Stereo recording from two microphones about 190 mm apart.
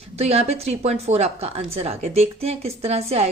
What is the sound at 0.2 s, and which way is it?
A woman's voice, 35° right (ahead or behind).